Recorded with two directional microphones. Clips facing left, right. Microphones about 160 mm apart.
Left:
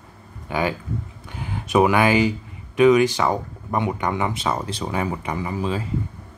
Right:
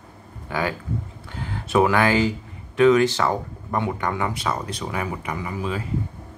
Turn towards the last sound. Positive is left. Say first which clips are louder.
# left 3 dB
turn(degrees=30)  # may be behind; listen again after turning